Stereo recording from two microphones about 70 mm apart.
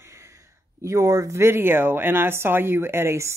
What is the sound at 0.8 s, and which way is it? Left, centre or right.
A woman's voice, right.